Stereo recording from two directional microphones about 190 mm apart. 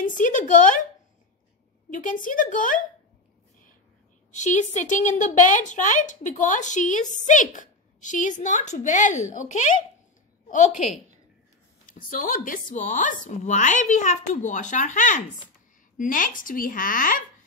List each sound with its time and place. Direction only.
0.0 s a woman's voice: 45° left (ahead or behind)
2.0 s a woman's voice: 45° left (ahead or behind)
4.3 s a woman's voice: 40° left (ahead or behind)
12.1 s a woman's voice: 45° left (ahead or behind)